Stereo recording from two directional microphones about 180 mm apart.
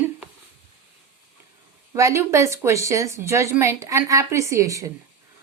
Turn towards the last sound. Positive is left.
turn(degrees=-20)  # may be behind; listen again after turning